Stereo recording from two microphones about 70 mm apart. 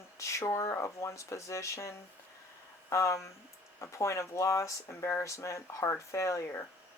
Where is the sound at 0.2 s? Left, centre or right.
Left.